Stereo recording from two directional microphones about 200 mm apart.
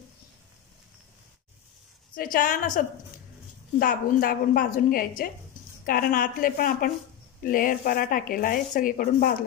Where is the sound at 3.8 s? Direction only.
45° left (ahead or behind).